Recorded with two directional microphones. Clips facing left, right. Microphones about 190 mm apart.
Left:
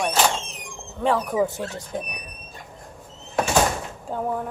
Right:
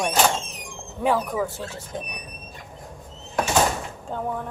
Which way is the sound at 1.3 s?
20° left (ahead or behind).